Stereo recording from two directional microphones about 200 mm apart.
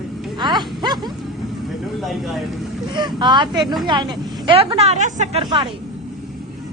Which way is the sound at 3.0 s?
20° right (ahead or behind).